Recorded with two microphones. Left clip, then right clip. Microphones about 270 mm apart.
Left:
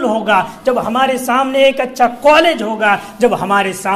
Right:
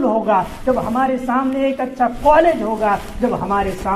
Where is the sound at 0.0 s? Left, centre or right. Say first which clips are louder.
Left 2 dB; left.